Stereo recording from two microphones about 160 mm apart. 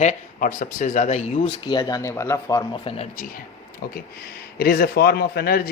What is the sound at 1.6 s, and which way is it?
Speech, 25° left (ahead or behind).